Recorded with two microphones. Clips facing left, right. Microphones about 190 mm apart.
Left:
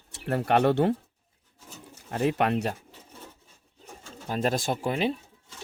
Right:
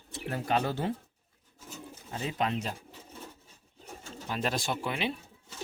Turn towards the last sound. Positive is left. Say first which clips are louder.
# left 5 dB
turn(degrees=45)  # may be behind; listen again after turning